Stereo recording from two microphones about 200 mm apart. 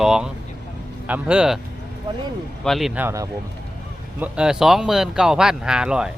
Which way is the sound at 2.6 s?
Centre (ahead or behind).